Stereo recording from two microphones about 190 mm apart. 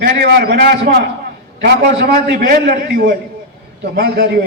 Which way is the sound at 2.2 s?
55° right (ahead or behind).